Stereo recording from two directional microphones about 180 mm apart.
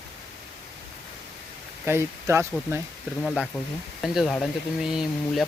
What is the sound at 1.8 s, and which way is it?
Speech, 15° right (ahead or behind).